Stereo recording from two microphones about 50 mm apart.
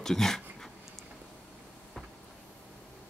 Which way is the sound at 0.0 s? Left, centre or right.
Centre.